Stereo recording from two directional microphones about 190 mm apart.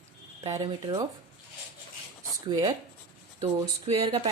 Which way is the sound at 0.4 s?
15° right (ahead or behind).